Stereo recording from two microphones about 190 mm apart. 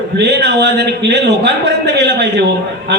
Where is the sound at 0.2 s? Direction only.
65° right (ahead or behind).